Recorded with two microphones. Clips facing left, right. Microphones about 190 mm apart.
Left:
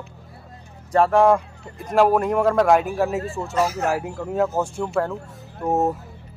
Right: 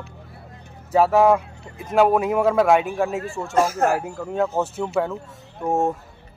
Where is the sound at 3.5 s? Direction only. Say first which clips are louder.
Right 3 dB; 50° right (ahead or behind).